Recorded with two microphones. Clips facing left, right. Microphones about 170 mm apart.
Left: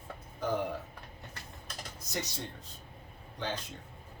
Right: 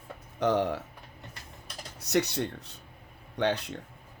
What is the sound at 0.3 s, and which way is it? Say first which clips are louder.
Speech: right 7 dB; 75° right (ahead or behind).